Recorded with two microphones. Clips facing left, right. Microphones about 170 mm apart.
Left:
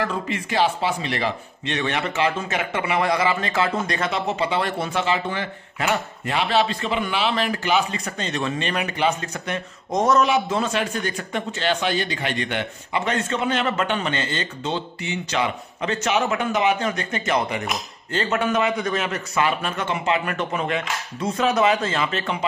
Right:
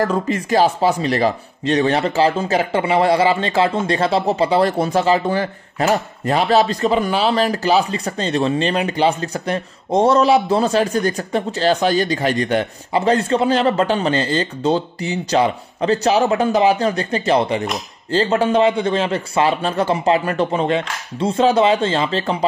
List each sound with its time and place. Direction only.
0.0 s speech: 40° right (ahead or behind)